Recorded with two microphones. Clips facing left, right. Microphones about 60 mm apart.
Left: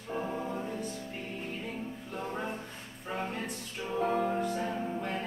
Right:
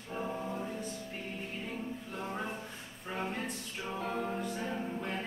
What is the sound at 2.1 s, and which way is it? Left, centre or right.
Music, centre.